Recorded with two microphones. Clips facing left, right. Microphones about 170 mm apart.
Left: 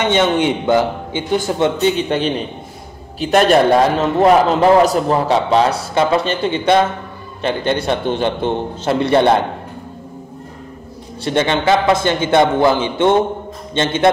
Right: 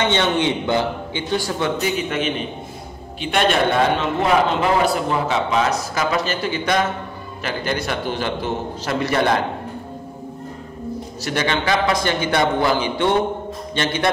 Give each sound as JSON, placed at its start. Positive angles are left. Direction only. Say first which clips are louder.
{"t": 0.1, "sound": "a man's voice", "louder": "left 4 dB", "side_deg": 15}
{"t": 11.2, "sound": "a man's voice", "louder": "left 6 dB", "side_deg": 25}